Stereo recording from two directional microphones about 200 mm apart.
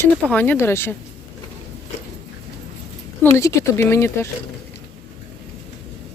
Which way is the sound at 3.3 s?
15° left (ahead or behind).